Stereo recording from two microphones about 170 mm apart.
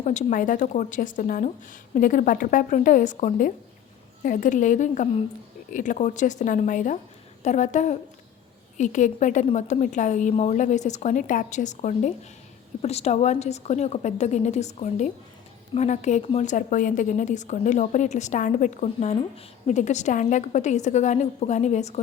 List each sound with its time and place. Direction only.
0.0 s a woman's voice: 45° left (ahead or behind)